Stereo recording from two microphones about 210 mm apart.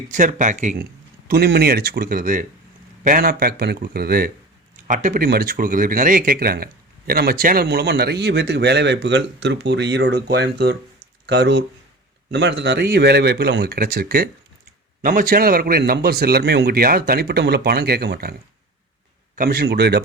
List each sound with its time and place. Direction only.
0.1 s speech: 35° right (ahead or behind)
1.3 s speech: 50° right (ahead or behind)
19.4 s speech: 45° right (ahead or behind)